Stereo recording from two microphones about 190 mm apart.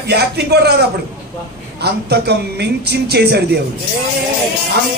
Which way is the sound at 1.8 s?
60° right (ahead or behind).